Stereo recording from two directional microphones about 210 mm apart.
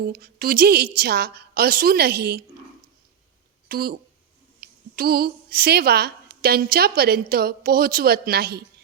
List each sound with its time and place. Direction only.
0.0 s a woman's voice: 45° right (ahead or behind)
3.7 s a woman's voice: 45° right (ahead or behind)